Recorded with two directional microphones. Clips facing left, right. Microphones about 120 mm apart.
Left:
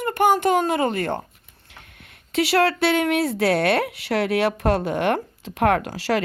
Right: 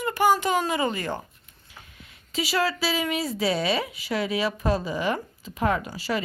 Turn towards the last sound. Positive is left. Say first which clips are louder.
# left 5 dB
turn(degrees=90)